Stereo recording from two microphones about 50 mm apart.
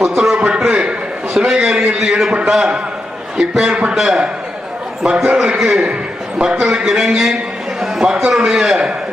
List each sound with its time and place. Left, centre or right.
0.2 s a sound: centre
2.5 s a man's voice: centre
3.7 s a man's voice: right
5.5 s a man's voice: centre